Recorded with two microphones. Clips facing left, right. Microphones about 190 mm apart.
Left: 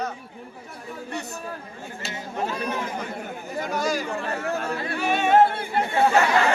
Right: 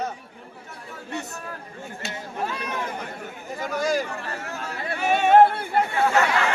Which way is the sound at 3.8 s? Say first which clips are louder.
Right 4 dB; 50° right (ahead or behind).